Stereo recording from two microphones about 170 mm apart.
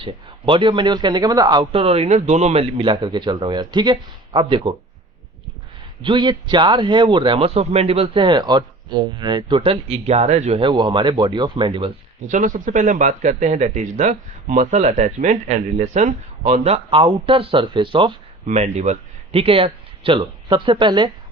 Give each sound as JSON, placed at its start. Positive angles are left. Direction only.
{"t": 0.0, "sound": "a man's voice", "side_deg": -30}
{"t": 6.0, "sound": "a man's voice", "side_deg": -30}
{"t": 10.6, "sound": "a man's voice", "side_deg": -25}
{"t": 12.3, "sound": "speech", "side_deg": -50}
{"t": 18.4, "sound": "speech", "side_deg": -40}